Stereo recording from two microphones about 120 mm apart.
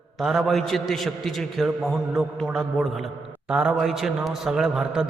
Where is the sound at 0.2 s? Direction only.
Centre (ahead or behind).